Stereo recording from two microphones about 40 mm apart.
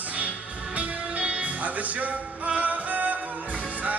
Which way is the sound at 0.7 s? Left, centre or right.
Right.